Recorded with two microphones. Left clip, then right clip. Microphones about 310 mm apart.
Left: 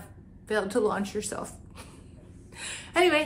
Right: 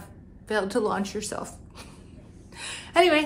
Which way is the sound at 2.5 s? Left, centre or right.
Centre.